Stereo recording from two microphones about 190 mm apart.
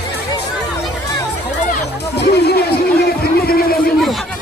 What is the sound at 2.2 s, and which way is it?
Music, 60° left (ahead or behind).